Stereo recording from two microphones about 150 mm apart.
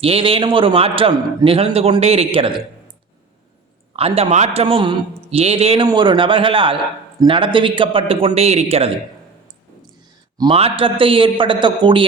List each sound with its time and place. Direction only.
0.0 s a man's voice: 40° right (ahead or behind)
3.9 s a man's voice: 40° right (ahead or behind)
10.5 s a man's voice: 40° right (ahead or behind)